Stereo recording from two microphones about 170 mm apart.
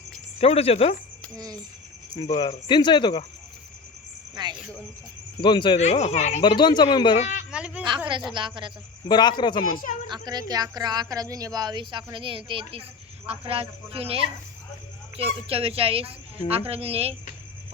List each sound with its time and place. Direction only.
0.3 s speech: 35° left (ahead or behind)
2.3 s speech: 25° left (ahead or behind)
4.4 s speech: 25° right (ahead or behind)
5.4 s speech: 30° left (ahead or behind)
5.8 s speech: 40° left (ahead or behind)
6.4 s speech: 25° left (ahead or behind)
7.2 s a woman's voice: 45° left (ahead or behind)
7.5 s a woman's voice: 5° right (ahead or behind)
7.9 s speech: 30° right (ahead or behind)
9.0 s speech: 25° left (ahead or behind)
9.6 s a woman's voice: 50° left (ahead or behind)
10.1 s speech: 25° right (ahead or behind)